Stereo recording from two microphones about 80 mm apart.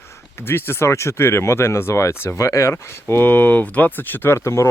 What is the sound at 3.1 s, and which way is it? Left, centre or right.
Speech, left.